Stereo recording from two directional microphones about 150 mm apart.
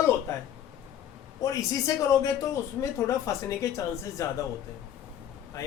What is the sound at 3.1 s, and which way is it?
Speech, 20° left (ahead or behind).